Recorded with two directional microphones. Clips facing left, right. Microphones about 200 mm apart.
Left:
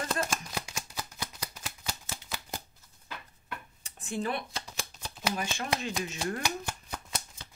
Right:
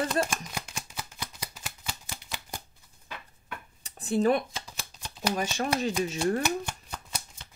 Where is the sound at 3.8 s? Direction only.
35° right (ahead or behind).